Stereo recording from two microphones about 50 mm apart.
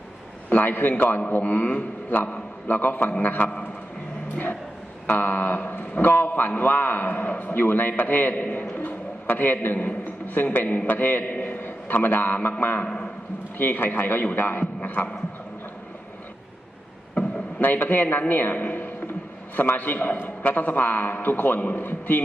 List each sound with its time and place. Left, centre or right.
0.5 s a man's voice: left
5.0 s a man's voice: left
8.7 s a sound: left
9.7 s a man's voice: left
17.6 s a man's voice: left